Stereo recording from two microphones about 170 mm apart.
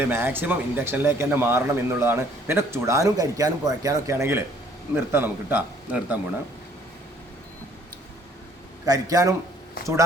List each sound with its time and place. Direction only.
0.0 s speech: 15° right (ahead or behind)
8.9 s a man's voice: 20° right (ahead or behind)
9.8 s speech: 60° left (ahead or behind)